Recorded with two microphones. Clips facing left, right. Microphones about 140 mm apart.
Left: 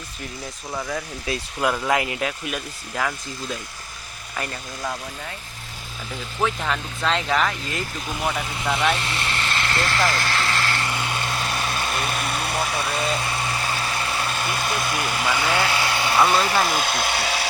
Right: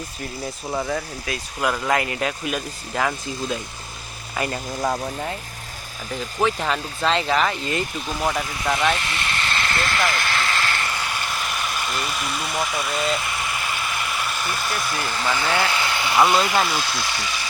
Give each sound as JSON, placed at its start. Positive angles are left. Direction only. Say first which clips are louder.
{"t": 1.3, "sound": "speech", "louder": "left 3 dB", "side_deg": 30}
{"t": 1.6, "sound": "speech", "louder": "even", "side_deg": 10}
{"t": 4.8, "sound": "speech", "louder": "right 6 dB", "side_deg": -35}
{"t": 6.4, "sound": "speech", "louder": "right 2 dB", "side_deg": -5}
{"t": 8.2, "sound": "speech", "louder": "right 2 dB", "side_deg": -15}
{"t": 9.0, "sound": "speech", "louder": "even", "side_deg": 30}
{"t": 10.2, "sound": "vehicle", "louder": "even", "side_deg": 25}
{"t": 10.6, "sound": "a sound", "louder": "even", "side_deg": 25}
{"t": 15.7, "sound": "vehicle", "louder": "left 1 dB", "side_deg": 25}
{"t": 16.8, "sound": "speech", "louder": "left 4 dB", "side_deg": 60}